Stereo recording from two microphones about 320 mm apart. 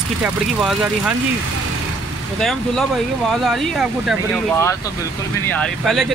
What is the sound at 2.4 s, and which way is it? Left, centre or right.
Speech, centre.